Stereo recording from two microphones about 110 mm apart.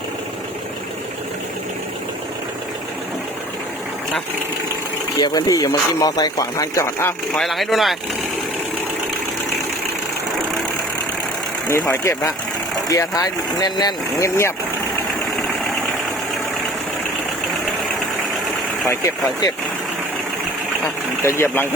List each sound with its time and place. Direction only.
5.2 s speech: 35° left (ahead or behind)
7.3 s speech: centre (ahead or behind)
11.9 s speech: 25° left (ahead or behind)
14.2 s speech: 25° left (ahead or behind)
18.9 s speech: 30° left (ahead or behind)
20.8 s speech: 25° left (ahead or behind)